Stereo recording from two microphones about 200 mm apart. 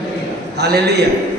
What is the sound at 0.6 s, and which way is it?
Speech, 55° right (ahead or behind).